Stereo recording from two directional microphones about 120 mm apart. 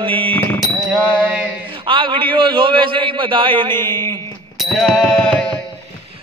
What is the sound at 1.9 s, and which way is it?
Music, 45° right (ahead or behind).